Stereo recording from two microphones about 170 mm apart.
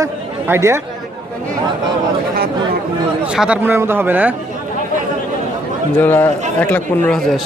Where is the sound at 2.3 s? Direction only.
60° right (ahead or behind).